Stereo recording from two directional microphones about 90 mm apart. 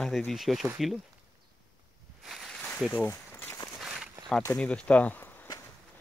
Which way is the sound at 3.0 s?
30° left (ahead or behind).